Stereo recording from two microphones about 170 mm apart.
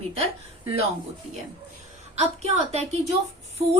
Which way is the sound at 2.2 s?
40° right (ahead or behind).